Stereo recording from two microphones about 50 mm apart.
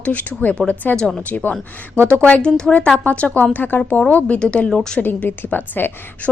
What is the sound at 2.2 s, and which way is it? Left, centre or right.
A woman's voice, left.